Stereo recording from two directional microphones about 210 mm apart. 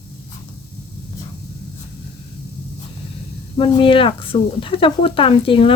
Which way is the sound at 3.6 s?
25° left (ahead or behind).